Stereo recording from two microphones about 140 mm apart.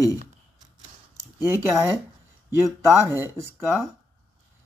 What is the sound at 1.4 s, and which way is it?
Speech, 20° right (ahead or behind).